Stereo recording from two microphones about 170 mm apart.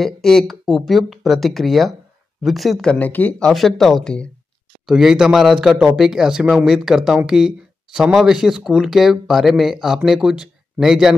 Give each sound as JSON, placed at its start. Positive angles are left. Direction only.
{"t": 0.0, "sound": "speech", "side_deg": 0}